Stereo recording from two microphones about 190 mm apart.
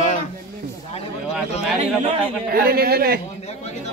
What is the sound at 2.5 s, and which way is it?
Speech, 55° right (ahead or behind).